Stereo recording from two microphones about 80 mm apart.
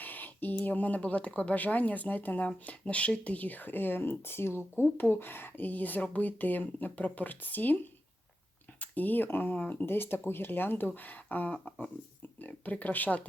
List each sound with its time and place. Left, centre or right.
0.0 s speech: left
8.8 s speech: left